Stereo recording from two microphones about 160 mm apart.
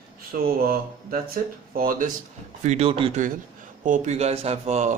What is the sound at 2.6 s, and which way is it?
Speech, 45° right (ahead or behind).